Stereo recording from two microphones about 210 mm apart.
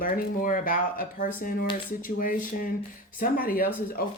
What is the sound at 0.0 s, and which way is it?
Speech, 40° left (ahead or behind).